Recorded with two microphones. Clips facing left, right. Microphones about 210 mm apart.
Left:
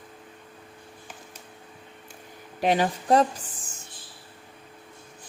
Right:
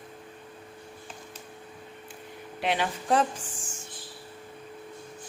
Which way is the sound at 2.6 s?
40° left (ahead or behind).